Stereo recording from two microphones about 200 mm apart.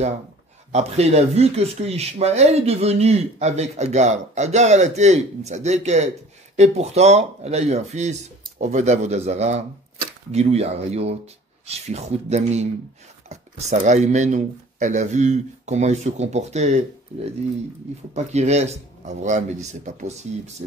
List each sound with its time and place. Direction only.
0.7 s speech: 35° right (ahead or behind)